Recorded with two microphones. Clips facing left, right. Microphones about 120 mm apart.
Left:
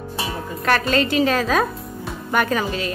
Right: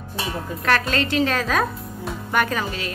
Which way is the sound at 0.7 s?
5° left (ahead or behind).